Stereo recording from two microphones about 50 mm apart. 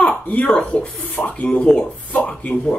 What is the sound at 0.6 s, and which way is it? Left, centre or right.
Speech, left.